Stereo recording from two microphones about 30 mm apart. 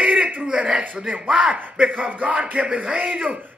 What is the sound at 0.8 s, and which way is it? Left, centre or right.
Speech, right.